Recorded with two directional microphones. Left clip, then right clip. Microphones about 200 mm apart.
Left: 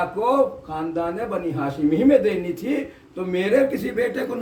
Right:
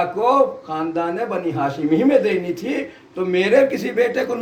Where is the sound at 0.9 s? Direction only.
20° left (ahead or behind).